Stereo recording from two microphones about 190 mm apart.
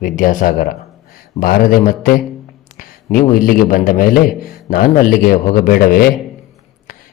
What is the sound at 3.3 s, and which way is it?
A man's voice, 45° left (ahead or behind).